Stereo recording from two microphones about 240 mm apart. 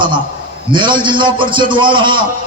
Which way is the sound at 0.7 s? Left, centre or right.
Centre.